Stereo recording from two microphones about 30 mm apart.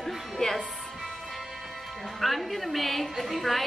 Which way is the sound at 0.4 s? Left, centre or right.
Left.